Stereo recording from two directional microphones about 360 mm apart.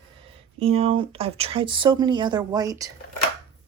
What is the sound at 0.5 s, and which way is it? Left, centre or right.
Speech, centre.